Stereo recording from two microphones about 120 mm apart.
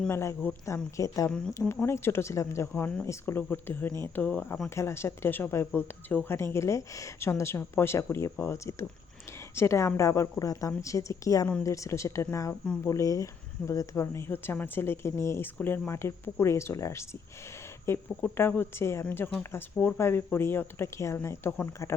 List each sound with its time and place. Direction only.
0.1 s speech: 20° left (ahead or behind)
4.7 s speech: 20° left (ahead or behind)